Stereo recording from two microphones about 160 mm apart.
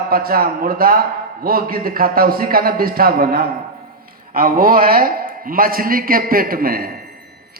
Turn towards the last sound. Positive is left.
turn(degrees=-65)  # may be behind; listen again after turning